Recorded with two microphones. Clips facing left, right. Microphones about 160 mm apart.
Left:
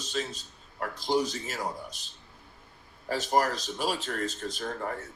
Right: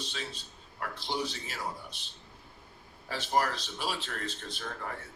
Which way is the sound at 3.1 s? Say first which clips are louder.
Left 4 dB; 45° left (ahead or behind).